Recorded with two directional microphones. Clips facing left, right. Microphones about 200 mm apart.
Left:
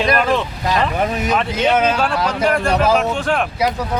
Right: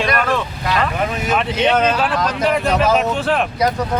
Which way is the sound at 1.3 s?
5° left (ahead or behind).